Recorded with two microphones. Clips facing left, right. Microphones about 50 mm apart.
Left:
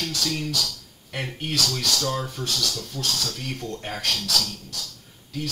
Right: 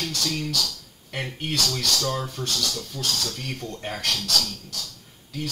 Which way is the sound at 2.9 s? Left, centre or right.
Left.